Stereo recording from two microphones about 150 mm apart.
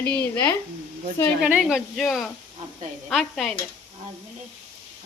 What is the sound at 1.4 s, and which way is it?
Speech, 5° right (ahead or behind).